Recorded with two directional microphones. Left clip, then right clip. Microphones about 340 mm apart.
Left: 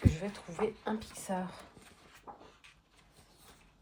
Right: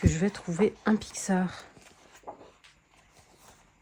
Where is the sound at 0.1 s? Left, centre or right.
Right.